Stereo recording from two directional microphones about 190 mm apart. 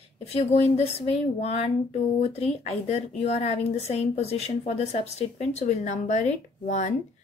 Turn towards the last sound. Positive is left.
turn(degrees=40)  # may be behind; listen again after turning